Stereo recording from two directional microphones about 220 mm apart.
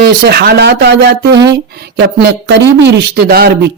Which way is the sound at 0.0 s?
45° right (ahead or behind).